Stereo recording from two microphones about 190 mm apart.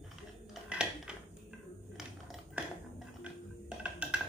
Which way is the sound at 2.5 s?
5° right (ahead or behind).